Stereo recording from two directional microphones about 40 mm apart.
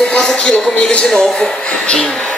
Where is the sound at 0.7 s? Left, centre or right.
Left.